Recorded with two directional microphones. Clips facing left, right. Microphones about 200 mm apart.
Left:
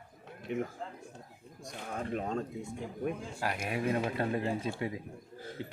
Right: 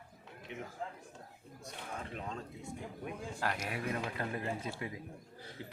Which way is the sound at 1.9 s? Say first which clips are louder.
Left 9 dB; 50° left (ahead or behind).